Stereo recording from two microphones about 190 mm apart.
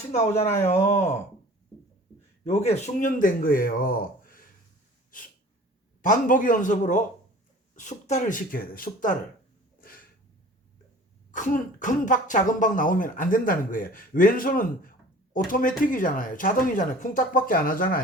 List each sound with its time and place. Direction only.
0.1 s speech: 35° left (ahead or behind)
2.4 s speech: 35° left (ahead or behind)
5.1 s sneeze: 45° left (ahead or behind)
6.0 s speech: 45° left (ahead or behind)
9.8 s a sound: 50° left (ahead or behind)
11.3 s speech: 45° left (ahead or behind)